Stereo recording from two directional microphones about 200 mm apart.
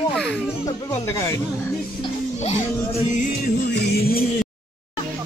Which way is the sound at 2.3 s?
35° left (ahead or behind).